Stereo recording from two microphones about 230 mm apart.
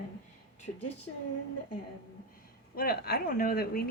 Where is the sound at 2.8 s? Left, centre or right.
Left.